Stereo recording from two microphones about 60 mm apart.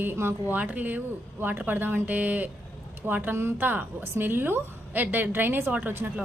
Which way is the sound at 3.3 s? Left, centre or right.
Right.